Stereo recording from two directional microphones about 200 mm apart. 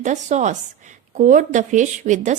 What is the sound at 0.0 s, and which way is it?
A woman's voice, 35° right (ahead or behind).